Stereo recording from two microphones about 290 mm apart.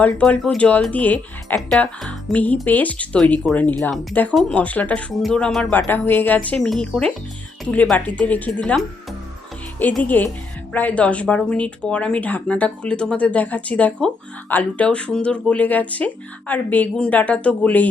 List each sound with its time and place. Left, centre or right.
0.0 s speech: centre